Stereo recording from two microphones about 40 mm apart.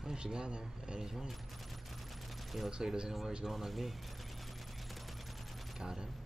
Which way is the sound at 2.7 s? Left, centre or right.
Centre.